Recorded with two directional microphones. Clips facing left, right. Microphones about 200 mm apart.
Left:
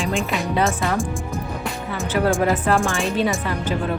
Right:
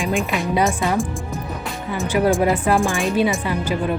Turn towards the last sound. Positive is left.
turn(degrees=-10)  # may be behind; listen again after turning